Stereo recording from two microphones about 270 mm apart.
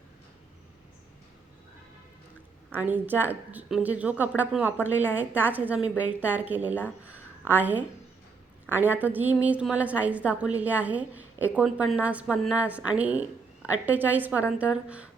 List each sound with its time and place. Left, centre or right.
2.6 s a woman's voice: centre